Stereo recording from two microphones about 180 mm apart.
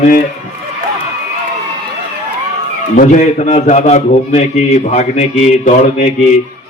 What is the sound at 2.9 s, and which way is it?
A man's voice, 45° left (ahead or behind).